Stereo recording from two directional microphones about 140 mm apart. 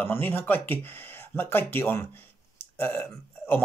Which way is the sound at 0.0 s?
15° left (ahead or behind).